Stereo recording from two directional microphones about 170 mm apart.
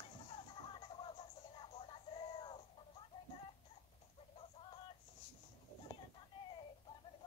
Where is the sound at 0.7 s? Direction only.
30° left (ahead or behind).